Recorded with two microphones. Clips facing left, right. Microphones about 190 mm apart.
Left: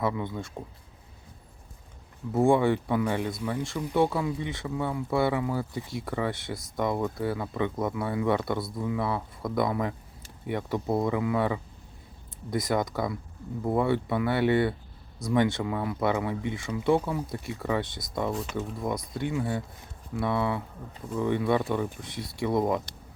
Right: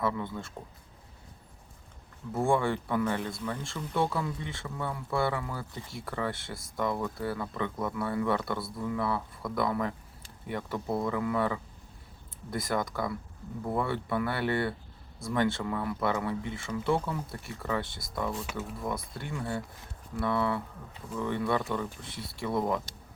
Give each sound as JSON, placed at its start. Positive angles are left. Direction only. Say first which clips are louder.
{"t": 0.0, "sound": "speech", "louder": "left 2 dB", "side_deg": 15}
{"t": 2.3, "sound": "speech", "louder": "left 5 dB", "side_deg": 20}